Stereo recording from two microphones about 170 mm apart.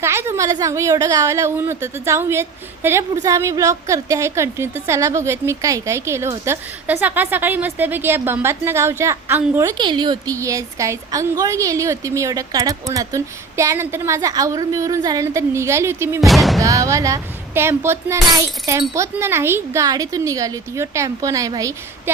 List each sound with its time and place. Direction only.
0.0 s a woman's voice: 15° right (ahead or behind)
16.2 s music: centre (ahead or behind)
16.6 s a woman's voice: 20° right (ahead or behind)